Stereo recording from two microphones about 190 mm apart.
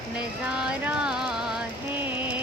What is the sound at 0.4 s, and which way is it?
Music, 5° right (ahead or behind).